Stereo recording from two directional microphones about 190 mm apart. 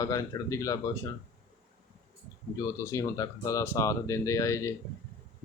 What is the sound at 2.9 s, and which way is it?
Speech, 15° left (ahead or behind).